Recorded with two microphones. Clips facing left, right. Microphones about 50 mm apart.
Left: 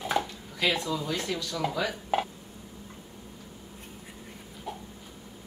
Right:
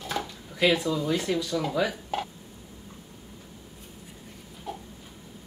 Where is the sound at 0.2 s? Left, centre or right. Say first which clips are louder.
Left 3 dB; left.